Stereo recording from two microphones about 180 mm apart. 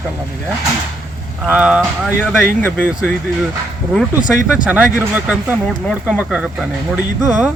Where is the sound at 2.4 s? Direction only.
10° left (ahead or behind).